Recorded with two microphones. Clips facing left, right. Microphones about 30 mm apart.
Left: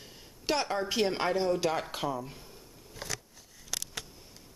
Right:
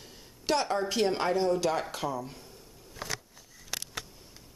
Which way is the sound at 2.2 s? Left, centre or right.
Centre.